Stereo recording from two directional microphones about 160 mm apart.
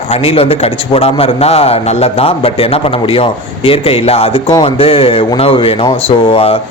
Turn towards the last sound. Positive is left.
turn(degrees=40)  # may be behind; listen again after turning